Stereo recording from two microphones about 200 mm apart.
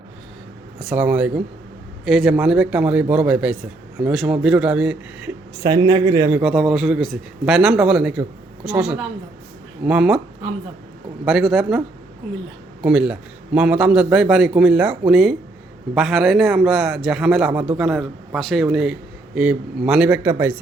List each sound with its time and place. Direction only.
0.8 s a man's voice: 5° right (ahead or behind)
5.6 s a man's voice: 20° right (ahead or behind)
6.4 s a man's voice: centre (ahead or behind)
9.8 s a man's voice: 5° right (ahead or behind)
11.3 s a man's voice: centre (ahead or behind)
12.8 s a man's voice: 5° right (ahead or behind)